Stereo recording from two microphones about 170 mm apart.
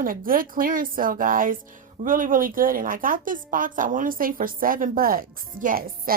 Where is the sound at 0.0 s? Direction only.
55° right (ahead or behind).